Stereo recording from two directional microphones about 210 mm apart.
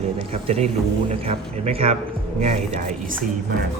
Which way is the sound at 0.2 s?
30° right (ahead or behind).